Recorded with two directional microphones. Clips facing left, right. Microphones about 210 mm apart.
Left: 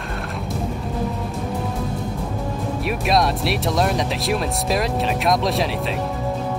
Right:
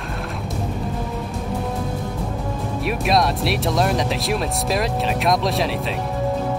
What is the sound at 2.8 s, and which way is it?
Speech, centre (ahead or behind).